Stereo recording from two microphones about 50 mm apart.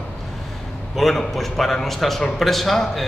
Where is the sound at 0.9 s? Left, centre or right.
Centre.